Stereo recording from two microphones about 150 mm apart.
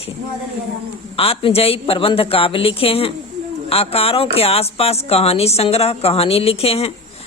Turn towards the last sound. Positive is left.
turn(degrees=40)  # may be behind; listen again after turning